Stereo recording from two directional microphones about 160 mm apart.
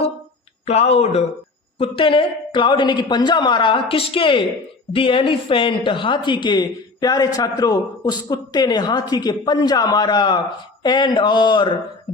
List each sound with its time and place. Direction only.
0.6 s a woman's voice: 40° left (ahead or behind)